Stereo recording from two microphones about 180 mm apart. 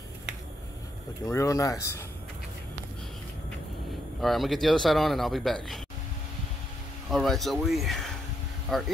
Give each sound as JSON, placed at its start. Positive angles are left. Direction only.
{"t": 1.2, "sound": "speech", "side_deg": 20}
{"t": 4.2, "sound": "speech", "side_deg": 0}
{"t": 7.1, "sound": "speech", "side_deg": 0}